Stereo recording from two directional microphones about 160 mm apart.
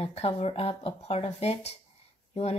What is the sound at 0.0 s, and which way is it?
Speech, 40° left (ahead or behind).